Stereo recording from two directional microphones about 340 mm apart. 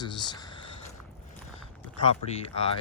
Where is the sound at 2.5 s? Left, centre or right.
Centre.